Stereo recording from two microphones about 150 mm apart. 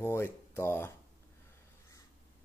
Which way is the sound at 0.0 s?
15° left (ahead or behind).